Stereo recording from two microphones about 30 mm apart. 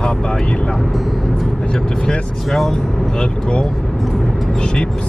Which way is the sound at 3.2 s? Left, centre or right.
Left.